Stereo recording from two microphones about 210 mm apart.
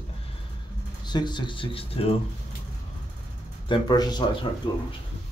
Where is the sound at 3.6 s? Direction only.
20° left (ahead or behind).